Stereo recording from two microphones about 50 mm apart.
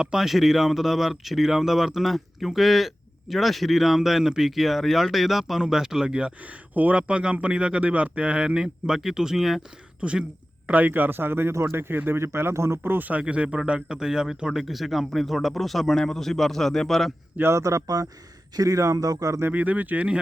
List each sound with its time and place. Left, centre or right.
0.0 s speech: centre
6.4 s speech: right; by 9.6 s centre
10.0 s speech: right
10.7 s speech: right
12.8 s speech: right
13.1 s speech: right; by 17.1 s centre
17.4 s speech: right
19.5 s speech: right